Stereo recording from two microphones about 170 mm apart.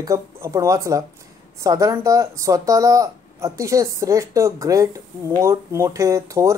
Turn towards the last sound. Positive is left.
turn(degrees=-20)  # may be behind; listen again after turning